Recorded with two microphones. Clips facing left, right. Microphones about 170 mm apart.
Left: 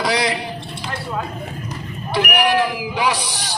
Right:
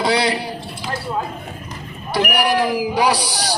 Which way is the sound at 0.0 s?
30° right (ahead or behind).